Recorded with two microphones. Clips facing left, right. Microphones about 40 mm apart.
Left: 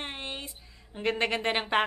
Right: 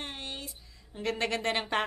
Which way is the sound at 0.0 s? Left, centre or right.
Left.